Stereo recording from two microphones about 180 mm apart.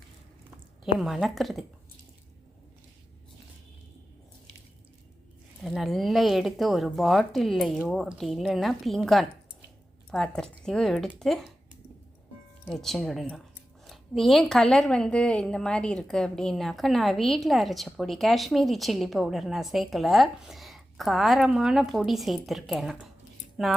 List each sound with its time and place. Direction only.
0.9 s a woman's voice: centre (ahead or behind)
5.6 s a woman's voice: centre (ahead or behind)
12.6 s a woman's voice: centre (ahead or behind)